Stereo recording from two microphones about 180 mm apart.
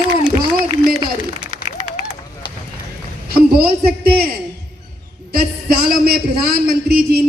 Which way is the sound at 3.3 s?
60° right (ahead or behind).